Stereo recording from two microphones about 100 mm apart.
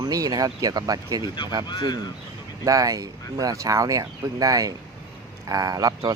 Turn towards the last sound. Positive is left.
turn(degrees=-40)  # may be behind; listen again after turning